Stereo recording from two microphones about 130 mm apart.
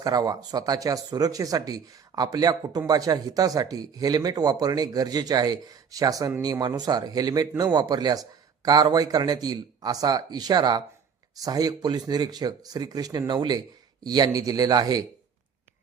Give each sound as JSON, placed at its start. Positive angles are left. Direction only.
{"t": 0.0, "sound": "speech", "side_deg": -30}